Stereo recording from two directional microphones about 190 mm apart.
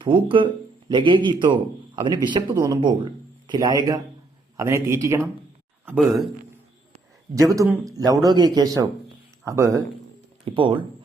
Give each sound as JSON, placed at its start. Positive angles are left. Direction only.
{"t": 0.0, "sound": "speech", "side_deg": -25}
{"t": 5.8, "sound": "speech", "side_deg": -5}
{"t": 7.5, "sound": "speech", "side_deg": -15}
{"t": 10.4, "sound": "speech", "side_deg": -25}